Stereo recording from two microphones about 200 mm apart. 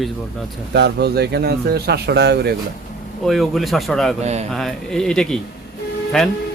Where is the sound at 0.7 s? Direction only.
55° right (ahead or behind).